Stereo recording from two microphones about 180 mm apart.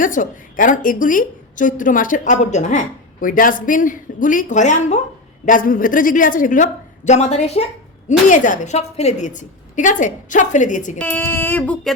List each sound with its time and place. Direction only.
0.0 s a woman's voice: 50° left (ahead or behind)
10.9 s speech: 10° left (ahead or behind)